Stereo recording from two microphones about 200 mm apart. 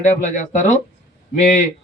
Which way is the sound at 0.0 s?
40° left (ahead or behind).